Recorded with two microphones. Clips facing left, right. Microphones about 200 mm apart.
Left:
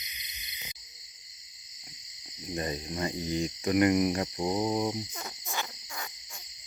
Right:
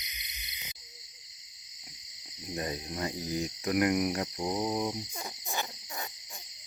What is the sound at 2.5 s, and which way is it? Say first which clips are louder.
Cricket: left 2 dB; centre (ahead or behind).